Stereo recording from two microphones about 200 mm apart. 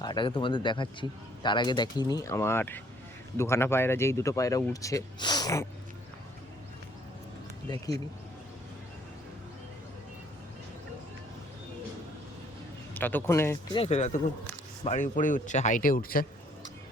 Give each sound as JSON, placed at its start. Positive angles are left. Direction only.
{"t": 0.0, "sound": "speech", "side_deg": 20}
{"t": 7.7, "sound": "speech", "side_deg": 20}
{"t": 12.9, "sound": "a man's voice", "side_deg": 10}
{"t": 13.7, "sound": "speech", "side_deg": 30}